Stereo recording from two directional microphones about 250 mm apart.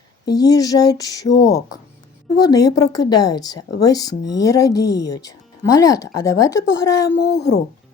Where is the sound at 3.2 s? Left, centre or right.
Left.